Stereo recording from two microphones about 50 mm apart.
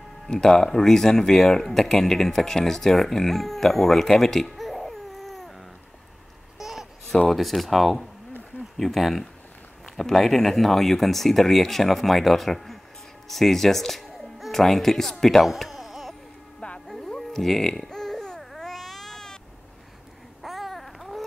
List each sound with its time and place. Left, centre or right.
0.3 s speech: centre
6.6 s babbling: centre
7.2 s speech: centre
16.8 s music: centre
17.1 s babbling: centre
20.4 s babbling: centre